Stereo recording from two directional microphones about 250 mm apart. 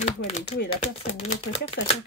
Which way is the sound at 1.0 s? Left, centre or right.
Left.